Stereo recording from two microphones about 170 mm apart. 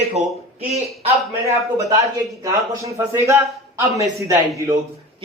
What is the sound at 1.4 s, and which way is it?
Speech, 20° right (ahead or behind).